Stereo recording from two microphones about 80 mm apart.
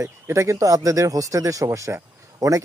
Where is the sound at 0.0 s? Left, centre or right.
Right.